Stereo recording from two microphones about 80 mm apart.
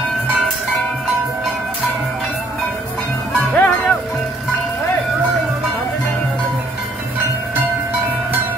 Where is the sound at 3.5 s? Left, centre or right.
Centre.